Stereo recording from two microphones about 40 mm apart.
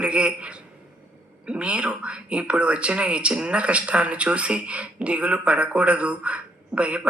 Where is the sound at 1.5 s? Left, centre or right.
Right.